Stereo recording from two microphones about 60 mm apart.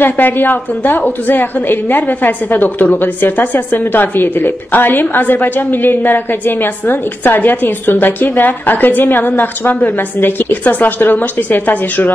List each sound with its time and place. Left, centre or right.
0.0 s a woman's voice: left